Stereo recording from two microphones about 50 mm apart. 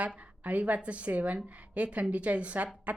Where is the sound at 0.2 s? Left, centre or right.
Right.